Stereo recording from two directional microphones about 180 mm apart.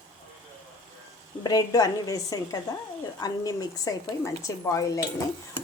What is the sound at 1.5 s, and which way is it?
A woman's voice, 20° left (ahead or behind).